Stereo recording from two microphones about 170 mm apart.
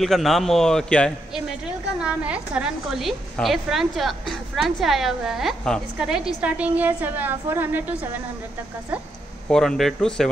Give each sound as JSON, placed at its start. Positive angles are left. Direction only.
{"t": 0.0, "sound": "a woman's voice", "side_deg": 0}
{"t": 2.0, "sound": "a woman's voice", "side_deg": -5}
{"t": 9.5, "sound": "a woman's voice", "side_deg": 5}